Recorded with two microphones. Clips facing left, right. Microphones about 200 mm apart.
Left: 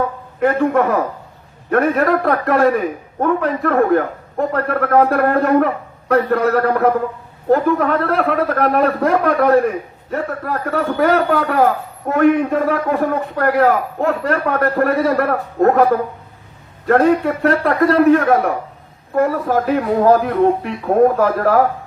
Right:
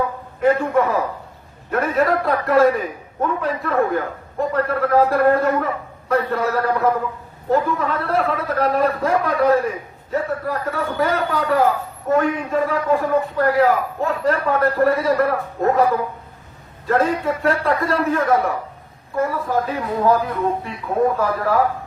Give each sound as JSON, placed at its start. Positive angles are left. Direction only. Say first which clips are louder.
{"t": 0.3, "sound": "a man's voice", "louder": "left 2 dB", "side_deg": 60}
{"t": 20.2, "sound": "a man's voice", "louder": "left 7 dB", "side_deg": 65}